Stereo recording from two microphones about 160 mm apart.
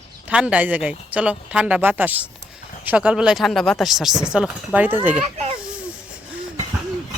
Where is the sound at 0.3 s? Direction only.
10° right (ahead or behind).